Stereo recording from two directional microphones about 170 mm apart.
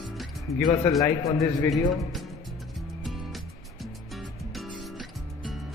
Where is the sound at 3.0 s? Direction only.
Centre (ahead or behind).